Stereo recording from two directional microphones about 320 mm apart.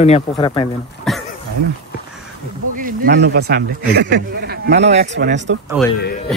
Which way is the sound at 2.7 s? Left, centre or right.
Right.